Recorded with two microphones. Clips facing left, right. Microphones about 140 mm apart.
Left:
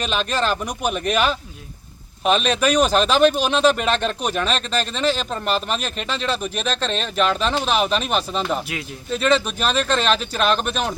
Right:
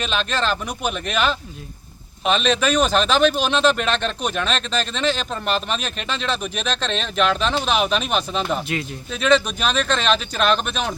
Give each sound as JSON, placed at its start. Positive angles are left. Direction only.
{"t": 0.1, "sound": "speech", "side_deg": 10}